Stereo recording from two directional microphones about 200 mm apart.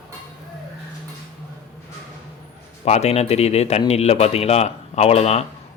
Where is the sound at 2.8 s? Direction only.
30° left (ahead or behind).